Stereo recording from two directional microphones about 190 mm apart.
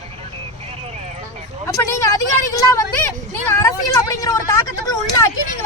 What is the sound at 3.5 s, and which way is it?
Vehicle, 15° left (ahead or behind).